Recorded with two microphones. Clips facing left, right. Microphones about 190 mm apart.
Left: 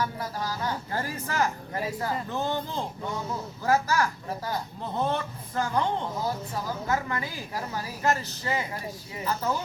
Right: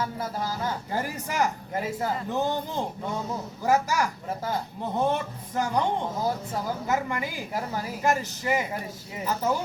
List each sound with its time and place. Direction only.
0.0 s speech: 25° right (ahead or behind)